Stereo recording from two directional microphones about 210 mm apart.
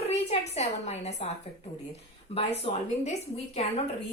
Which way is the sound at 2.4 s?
30° left (ahead or behind).